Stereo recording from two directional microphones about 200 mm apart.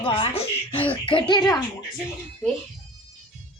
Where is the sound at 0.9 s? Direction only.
25° left (ahead or behind).